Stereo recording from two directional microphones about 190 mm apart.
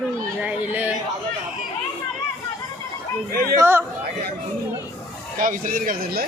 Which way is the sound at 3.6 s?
15° right (ahead or behind).